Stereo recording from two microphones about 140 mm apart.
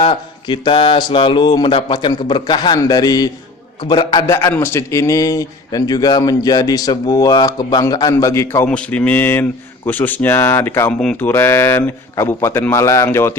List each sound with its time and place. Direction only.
0.0 s mantra: 35° left (ahead or behind)
3.8 s a man's voice: 30° left (ahead or behind)
8.6 s speech: 10° left (ahead or behind)
11.3 s a man's voice: 15° left (ahead or behind)